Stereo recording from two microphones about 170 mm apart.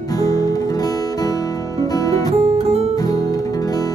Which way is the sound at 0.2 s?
20° left (ahead or behind).